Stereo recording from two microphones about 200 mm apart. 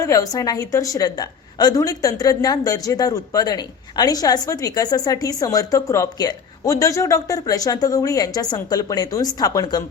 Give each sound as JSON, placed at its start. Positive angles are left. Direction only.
{"t": 0.0, "sound": "a woman's voice", "side_deg": 15}